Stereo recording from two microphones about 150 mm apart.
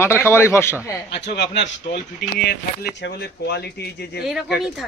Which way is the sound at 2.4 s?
90° left.